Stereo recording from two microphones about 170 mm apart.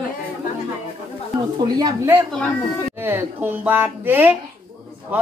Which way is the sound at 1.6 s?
20° right (ahead or behind).